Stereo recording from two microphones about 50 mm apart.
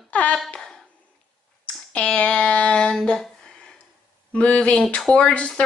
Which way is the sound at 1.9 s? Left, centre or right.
Left.